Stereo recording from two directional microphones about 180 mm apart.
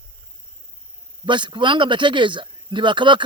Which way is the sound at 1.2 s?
25° right (ahead or behind).